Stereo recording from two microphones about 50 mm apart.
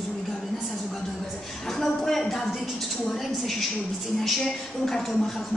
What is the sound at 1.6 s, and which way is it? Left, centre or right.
Speech, centre.